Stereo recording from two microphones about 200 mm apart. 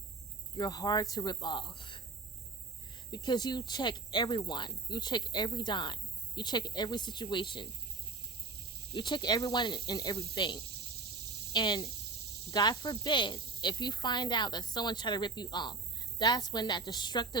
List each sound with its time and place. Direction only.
0.5 s speech: 20° left (ahead or behind)
3.1 s speech: 20° left (ahead or behind)
8.9 s speech: 20° left (ahead or behind)